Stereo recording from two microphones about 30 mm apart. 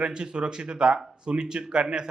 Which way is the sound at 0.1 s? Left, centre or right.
Right.